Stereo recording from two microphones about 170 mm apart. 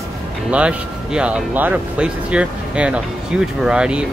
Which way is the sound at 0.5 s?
5° right (ahead or behind).